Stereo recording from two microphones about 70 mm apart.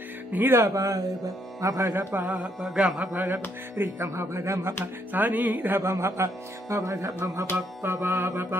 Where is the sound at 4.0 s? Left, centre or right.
Right.